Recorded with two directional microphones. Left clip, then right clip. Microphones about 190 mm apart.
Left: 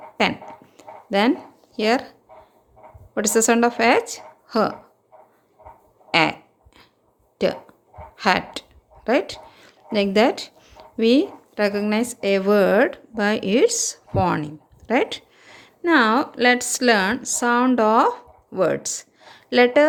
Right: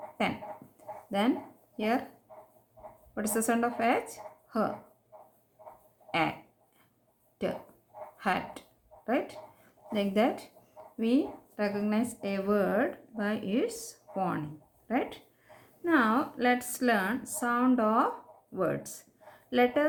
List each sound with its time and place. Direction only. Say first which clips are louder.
1.7 s speech: left 11 dB; 50° left (ahead or behind)
3.2 s speech: left 12 dB; 45° left (ahead or behind)
6.1 s a sound: left 11 dB; 50° left (ahead or behind)
8.1 s speech: left 11 dB; 50° left (ahead or behind)